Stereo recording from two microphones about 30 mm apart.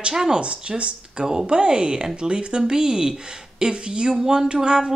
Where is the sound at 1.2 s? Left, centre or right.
Right.